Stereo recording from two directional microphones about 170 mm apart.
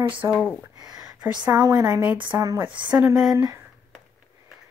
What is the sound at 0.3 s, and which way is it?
Speech, 5° left (ahead or behind).